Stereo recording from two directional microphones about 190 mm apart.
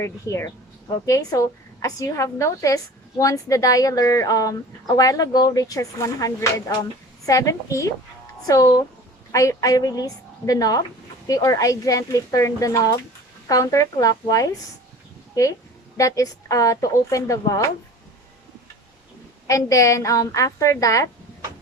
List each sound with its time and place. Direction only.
0.0 s a woman's voice: 15° left (ahead or behind)
16.0 s a woman's voice: 15° left (ahead or behind)
19.5 s a woman's voice: 15° left (ahead or behind)